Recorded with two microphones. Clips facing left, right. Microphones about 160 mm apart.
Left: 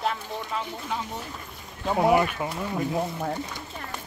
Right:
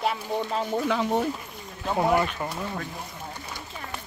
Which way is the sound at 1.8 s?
5° left (ahead or behind).